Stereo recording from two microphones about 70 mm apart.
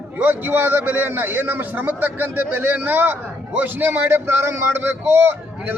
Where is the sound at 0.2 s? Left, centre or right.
Right.